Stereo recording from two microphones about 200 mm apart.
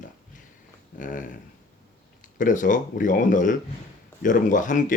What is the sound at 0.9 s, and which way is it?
Speech, 40° left (ahead or behind).